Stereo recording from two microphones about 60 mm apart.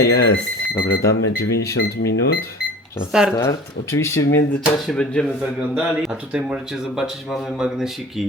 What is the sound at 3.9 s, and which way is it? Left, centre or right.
Speech, left.